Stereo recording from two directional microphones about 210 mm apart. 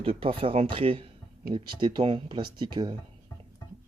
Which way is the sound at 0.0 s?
25° right (ahead or behind).